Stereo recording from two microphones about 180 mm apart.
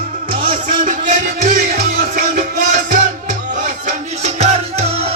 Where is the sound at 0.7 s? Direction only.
45° right (ahead or behind).